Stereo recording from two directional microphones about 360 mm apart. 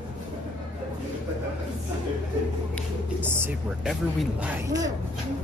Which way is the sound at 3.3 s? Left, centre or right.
Centre.